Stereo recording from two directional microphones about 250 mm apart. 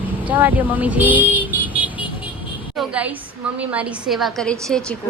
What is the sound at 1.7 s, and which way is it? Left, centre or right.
Vehicle, centre.